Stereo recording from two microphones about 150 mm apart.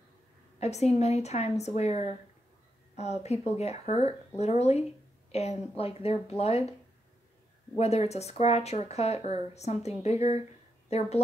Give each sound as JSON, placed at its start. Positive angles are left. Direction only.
{"t": 0.6, "sound": "a woman's voice", "side_deg": 45}
{"t": 7.7, "sound": "a woman's voice", "side_deg": 45}